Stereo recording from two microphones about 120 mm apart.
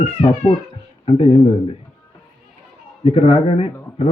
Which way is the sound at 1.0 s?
50° left (ahead or behind).